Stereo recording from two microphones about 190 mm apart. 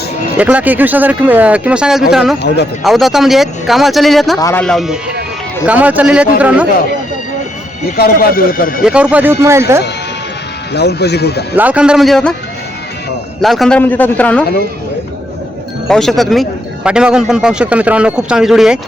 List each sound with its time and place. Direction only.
0.3 s a man's voice: 10° right (ahead or behind)
4.4 s a man's voice: 15° left (ahead or behind)
4.6 s a man's voice: centre (ahead or behind)
7.9 s speech: 55° left (ahead or behind)
8.8 s speech: 5° right (ahead or behind)
10.8 s speech: 60° left (ahead or behind)
11.5 s a man's voice: 10° right (ahead or behind)
13.4 s a man's voice: centre (ahead or behind)
15.9 s a man's voice: centre (ahead or behind)